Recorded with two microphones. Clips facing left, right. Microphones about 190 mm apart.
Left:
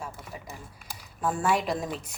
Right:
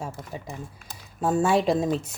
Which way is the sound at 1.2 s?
25° right (ahead or behind).